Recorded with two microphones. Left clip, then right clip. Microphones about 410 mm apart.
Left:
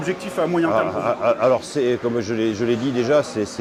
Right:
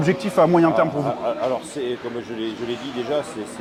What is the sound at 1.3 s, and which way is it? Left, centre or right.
A man's voice, left.